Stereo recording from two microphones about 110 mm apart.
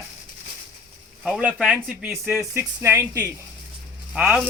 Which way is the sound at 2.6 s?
20° right (ahead or behind).